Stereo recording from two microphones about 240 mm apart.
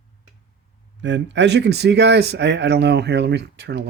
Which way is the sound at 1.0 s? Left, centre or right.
Right.